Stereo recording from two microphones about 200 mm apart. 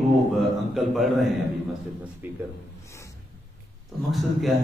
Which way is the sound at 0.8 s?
Centre (ahead or behind).